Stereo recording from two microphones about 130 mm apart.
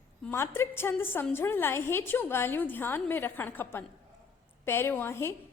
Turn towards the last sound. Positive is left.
turn(degrees=20)  # may be behind; listen again after turning